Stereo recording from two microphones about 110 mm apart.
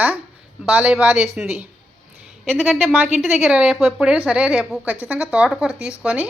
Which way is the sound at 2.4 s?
Centre (ahead or behind).